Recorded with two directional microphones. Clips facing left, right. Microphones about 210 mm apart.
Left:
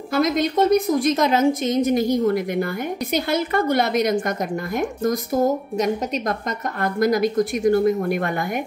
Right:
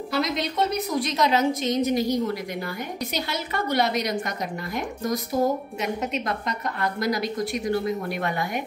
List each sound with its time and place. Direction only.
0.1 s a woman's voice: 50° left (ahead or behind)